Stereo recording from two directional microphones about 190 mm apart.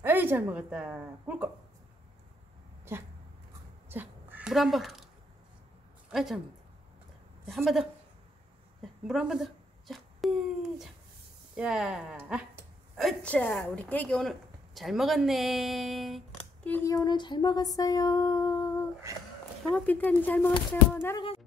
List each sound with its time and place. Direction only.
0.0 s a woman's voice: 10° right (ahead or behind)
2.9 s speech: 15° right (ahead or behind)
3.9 s a sound: 10° right (ahead or behind)
6.1 s speech: centre (ahead or behind)
7.4 s speech: centre (ahead or behind)
9.0 s a child's voice: 5° right (ahead or behind)
16.6 s a sound: 10° left (ahead or behind)
17.7 s music: 20° left (ahead or behind)
19.7 s speech: 10° left (ahead or behind)